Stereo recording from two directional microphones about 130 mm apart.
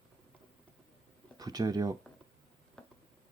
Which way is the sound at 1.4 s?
30° right (ahead or behind).